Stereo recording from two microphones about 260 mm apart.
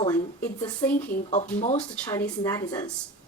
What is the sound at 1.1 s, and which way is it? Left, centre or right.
Speech, left.